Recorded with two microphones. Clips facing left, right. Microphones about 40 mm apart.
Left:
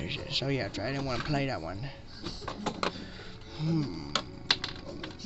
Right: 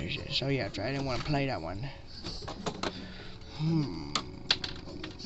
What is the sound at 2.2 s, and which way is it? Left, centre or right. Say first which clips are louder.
Printer: left 2 dB; left.